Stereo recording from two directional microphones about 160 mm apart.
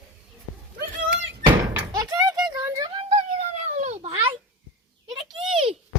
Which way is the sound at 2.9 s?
35° right (ahead or behind).